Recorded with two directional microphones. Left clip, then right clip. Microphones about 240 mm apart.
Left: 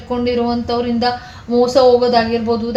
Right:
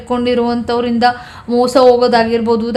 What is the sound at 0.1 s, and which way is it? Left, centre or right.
A woman's voice, right.